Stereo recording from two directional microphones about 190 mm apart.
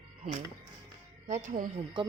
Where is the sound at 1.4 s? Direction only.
45° right (ahead or behind).